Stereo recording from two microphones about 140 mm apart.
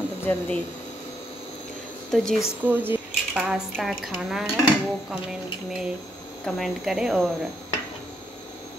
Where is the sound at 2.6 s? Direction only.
15° right (ahead or behind).